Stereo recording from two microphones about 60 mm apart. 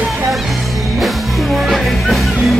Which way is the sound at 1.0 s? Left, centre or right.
Centre.